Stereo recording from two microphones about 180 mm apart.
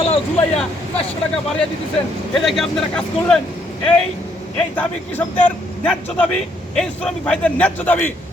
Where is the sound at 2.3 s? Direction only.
Centre (ahead or behind).